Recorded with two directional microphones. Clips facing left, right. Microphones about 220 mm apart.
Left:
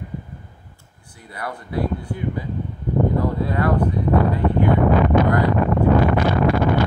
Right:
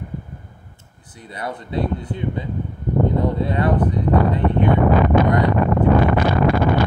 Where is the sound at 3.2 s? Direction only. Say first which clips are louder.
Right 1 dB; 20° right (ahead or behind).